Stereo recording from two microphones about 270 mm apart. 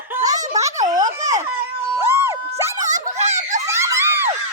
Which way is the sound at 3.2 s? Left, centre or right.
Right.